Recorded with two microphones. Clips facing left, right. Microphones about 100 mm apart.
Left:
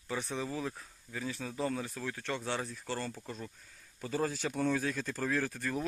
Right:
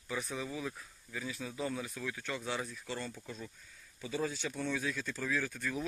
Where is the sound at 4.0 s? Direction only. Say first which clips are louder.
Left 3 dB; 50° left (ahead or behind).